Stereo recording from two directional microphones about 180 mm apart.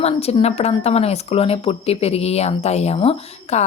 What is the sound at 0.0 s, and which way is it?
Speech, 35° left (ahead or behind).